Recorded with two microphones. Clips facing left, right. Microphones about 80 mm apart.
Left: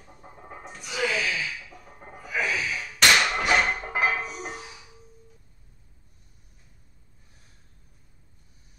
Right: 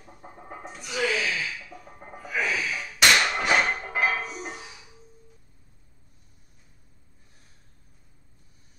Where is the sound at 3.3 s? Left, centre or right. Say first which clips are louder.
Even; centre.